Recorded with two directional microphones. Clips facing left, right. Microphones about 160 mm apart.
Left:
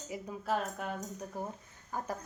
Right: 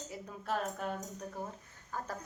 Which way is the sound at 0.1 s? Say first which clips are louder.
Left 4 dB; 10° left (ahead or behind).